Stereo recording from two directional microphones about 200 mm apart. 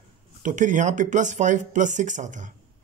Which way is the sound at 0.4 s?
40° right (ahead or behind).